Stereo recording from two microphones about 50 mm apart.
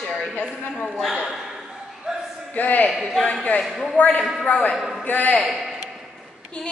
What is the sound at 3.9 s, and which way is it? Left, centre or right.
Speech, left.